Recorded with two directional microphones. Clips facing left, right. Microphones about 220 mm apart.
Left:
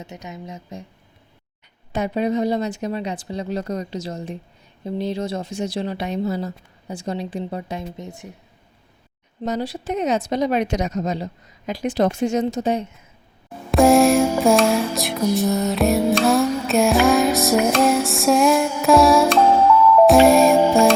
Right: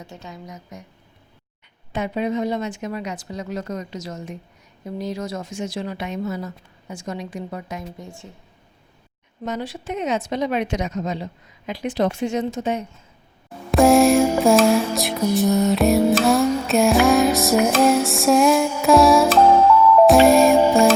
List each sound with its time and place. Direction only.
0.0 s a woman's voice: 20° left (ahead or behind)
1.9 s speech: 40° left (ahead or behind); by 8.3 s 20° left (ahead or behind)
9.4 s speech: 35° left (ahead or behind)
13.7 s music: centre (ahead or behind)